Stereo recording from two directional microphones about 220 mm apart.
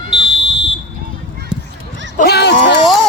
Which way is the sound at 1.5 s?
5° right (ahead or behind).